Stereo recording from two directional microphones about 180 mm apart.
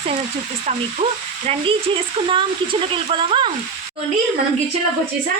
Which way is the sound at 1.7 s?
30° right (ahead or behind).